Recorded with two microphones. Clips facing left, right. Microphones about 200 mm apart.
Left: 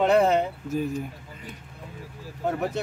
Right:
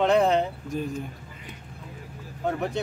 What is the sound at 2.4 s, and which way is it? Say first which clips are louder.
Speech: left 1 dB; 5° left (ahead or behind).